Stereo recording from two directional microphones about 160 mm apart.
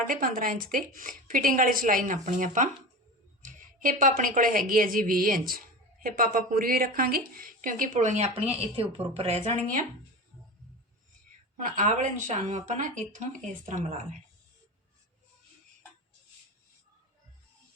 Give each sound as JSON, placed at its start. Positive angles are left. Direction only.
{"t": 0.1, "sound": "speech", "side_deg": -60}
{"t": 3.4, "sound": "a sound", "side_deg": -55}
{"t": 4.2, "sound": "a woman's voice", "side_deg": -60}
{"t": 11.5, "sound": "a woman's voice", "side_deg": -50}